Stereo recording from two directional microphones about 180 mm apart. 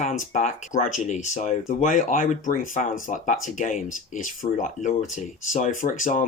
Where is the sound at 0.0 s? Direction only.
40° left (ahead or behind).